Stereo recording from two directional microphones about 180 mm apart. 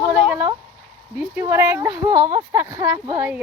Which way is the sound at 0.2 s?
5° right (ahead or behind).